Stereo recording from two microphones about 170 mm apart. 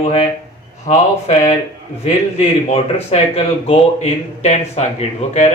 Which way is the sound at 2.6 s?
35° left (ahead or behind).